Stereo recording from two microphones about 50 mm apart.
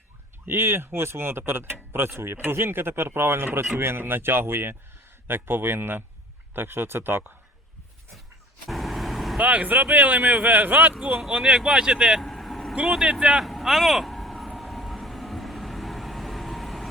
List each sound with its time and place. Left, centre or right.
0.4 s speech: right
8.6 s vehicle: centre
9.4 s speech: right
11.3 s speech: centre
12.2 s vehicle: centre
12.7 s speech: centre
13.4 s vehicle: centre